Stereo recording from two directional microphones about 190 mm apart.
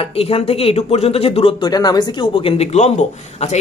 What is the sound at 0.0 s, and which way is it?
A man's voice, 30° left (ahead or behind).